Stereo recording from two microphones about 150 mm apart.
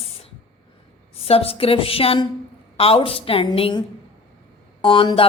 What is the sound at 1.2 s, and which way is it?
A woman's voice, 40° left (ahead or behind).